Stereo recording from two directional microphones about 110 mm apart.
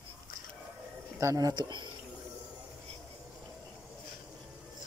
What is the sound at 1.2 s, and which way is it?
Speech, 30° right (ahead or behind).